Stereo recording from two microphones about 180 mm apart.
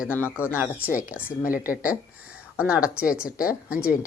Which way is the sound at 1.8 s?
10° right (ahead or behind).